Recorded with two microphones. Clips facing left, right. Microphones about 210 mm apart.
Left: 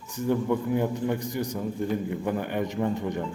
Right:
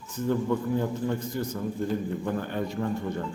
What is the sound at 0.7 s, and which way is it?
A man's voice, 15° left (ahead or behind).